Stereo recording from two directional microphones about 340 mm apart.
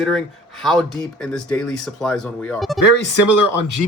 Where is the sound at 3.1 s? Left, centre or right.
Left.